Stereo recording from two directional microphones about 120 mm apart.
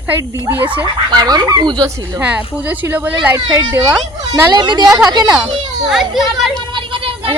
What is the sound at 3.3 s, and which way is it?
A child's voice, 30° right (ahead or behind).